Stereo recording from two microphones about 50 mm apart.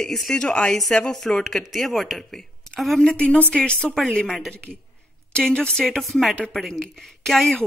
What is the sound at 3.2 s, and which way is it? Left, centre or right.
Speech, left.